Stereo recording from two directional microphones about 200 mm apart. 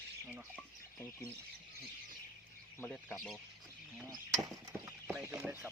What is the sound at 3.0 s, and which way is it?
Speech, centre (ahead or behind).